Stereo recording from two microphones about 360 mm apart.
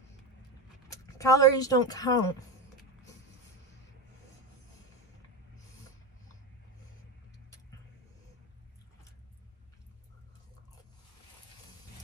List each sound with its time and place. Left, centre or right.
1.1 s a woman's voice: centre